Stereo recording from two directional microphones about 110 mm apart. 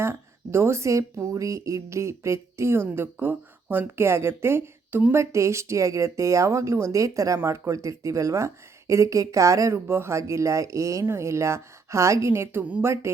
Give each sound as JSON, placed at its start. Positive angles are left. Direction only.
{"t": 0.0, "sound": "speech", "side_deg": -25}